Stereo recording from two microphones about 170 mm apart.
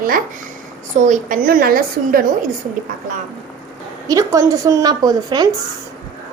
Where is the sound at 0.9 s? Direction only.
45° right (ahead or behind).